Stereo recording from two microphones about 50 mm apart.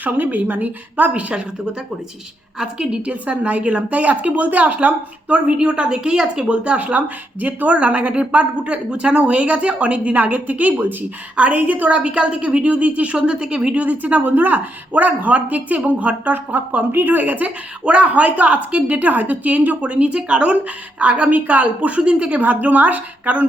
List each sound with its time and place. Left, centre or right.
0.0 s speech: right
2.6 s a woman's voice: centre
6.5 s a woman's voice: right